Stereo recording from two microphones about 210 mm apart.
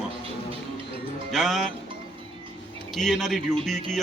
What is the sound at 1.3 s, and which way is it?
Speech, centre (ahead or behind).